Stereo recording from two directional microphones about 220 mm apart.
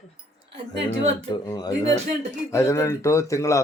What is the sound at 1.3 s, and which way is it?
Speech, 20° left (ahead or behind).